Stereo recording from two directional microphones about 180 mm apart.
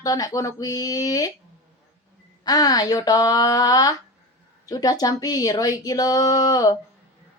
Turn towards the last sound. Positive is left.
turn(degrees=20)  # may be behind; listen again after turning